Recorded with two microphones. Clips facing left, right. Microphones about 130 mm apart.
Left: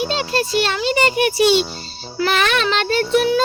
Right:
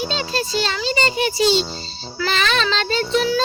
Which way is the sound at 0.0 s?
65° left (ahead or behind).